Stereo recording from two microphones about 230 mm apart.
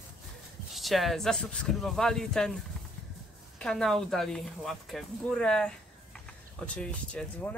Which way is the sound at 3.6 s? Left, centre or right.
Centre.